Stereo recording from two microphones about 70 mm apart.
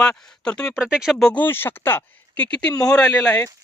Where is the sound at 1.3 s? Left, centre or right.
Left; by 2.9 s centre.